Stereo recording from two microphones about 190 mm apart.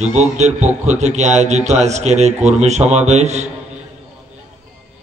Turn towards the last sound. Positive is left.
turn(degrees=-35)  # may be behind; listen again after turning